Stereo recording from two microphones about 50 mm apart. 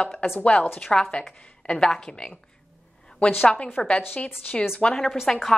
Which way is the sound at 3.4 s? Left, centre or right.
Left.